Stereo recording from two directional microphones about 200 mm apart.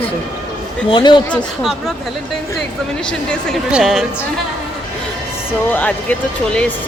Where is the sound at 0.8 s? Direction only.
25° left (ahead or behind).